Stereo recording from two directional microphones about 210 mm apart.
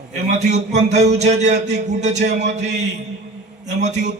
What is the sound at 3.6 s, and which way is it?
Speech, 35° right (ahead or behind).